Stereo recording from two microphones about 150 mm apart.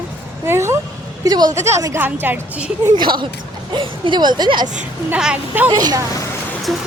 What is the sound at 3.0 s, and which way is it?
Speech, 30° right (ahead or behind).